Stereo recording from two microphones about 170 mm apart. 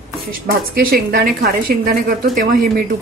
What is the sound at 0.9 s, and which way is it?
A woman's voice, 60° right (ahead or behind).